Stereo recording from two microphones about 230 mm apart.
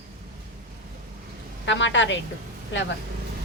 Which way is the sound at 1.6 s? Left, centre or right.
Left.